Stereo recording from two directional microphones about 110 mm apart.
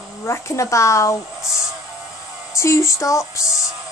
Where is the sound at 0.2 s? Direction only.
25° left (ahead or behind).